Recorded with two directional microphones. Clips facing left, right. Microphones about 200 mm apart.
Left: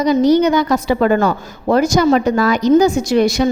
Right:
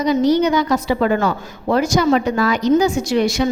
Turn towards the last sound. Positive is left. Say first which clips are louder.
# left 3 dB
turn(degrees=45)  # may be behind; listen again after turning